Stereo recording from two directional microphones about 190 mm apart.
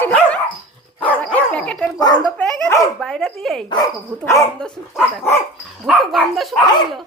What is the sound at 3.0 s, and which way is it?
Speech, 5° left (ahead or behind).